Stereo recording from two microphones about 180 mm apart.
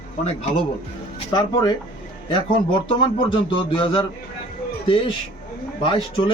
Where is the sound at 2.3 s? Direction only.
30° left (ahead or behind).